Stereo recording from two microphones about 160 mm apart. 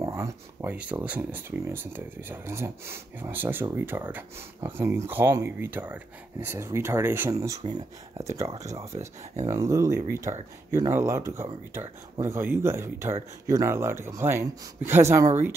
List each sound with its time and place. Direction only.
0.0 s speech: 15° right (ahead or behind)